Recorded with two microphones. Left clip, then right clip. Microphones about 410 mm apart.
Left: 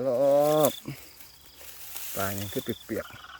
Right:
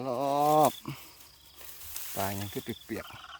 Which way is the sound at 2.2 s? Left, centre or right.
Centre.